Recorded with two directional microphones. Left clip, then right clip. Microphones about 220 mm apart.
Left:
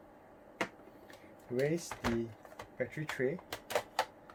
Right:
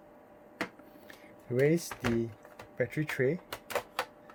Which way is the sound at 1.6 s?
50° right (ahead or behind).